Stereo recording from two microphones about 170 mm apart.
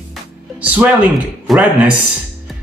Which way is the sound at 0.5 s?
10° right (ahead or behind).